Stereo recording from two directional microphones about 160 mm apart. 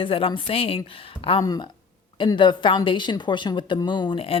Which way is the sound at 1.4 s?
20° left (ahead or behind).